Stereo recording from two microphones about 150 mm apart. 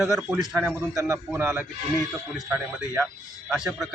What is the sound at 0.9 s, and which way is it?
Speech, 20° right (ahead or behind).